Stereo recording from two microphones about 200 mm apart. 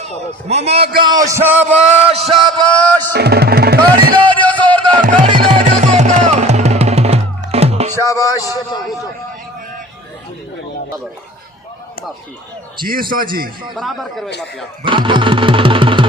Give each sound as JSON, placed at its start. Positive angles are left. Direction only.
{"t": 0.0, "sound": "a man's voice", "side_deg": -30}
{"t": 1.0, "sound": "a man's voice", "side_deg": -20}
{"t": 1.9, "sound": "a man's voice", "side_deg": -30}
{"t": 2.6, "sound": "music", "side_deg": 5}
{"t": 3.1, "sound": "music", "side_deg": -55}
{"t": 4.4, "sound": "music", "side_deg": 10}
{"t": 4.6, "sound": "music", "side_deg": -25}
{"t": 5.0, "sound": "music", "side_deg": -40}
{"t": 7.9, "sound": "a sound", "side_deg": 15}
{"t": 12.8, "sound": "music", "side_deg": -45}
{"t": 13.7, "sound": "speech", "side_deg": 0}
{"t": 14.8, "sound": "engine", "side_deg": -25}